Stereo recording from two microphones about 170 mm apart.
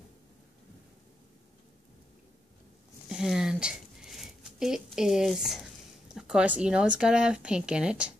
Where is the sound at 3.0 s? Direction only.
5° right (ahead or behind).